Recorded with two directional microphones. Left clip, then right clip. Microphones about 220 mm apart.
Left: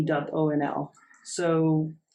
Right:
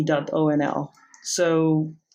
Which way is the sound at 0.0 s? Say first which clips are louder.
Right 4 dB; 50° right (ahead or behind).